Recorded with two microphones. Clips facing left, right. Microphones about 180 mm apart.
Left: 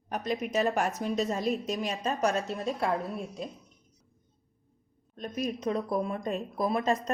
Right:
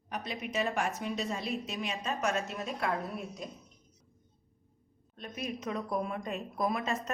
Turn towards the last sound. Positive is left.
turn(degrees=35)  # may be behind; listen again after turning